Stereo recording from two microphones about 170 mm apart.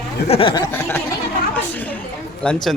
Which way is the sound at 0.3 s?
30° left (ahead or behind).